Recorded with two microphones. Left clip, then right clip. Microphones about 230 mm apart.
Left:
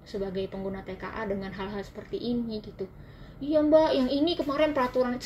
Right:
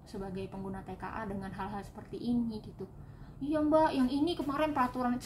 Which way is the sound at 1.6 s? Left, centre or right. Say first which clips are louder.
Left 4 dB; centre.